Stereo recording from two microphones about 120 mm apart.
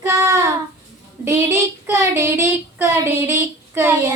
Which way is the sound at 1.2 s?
20° right (ahead or behind).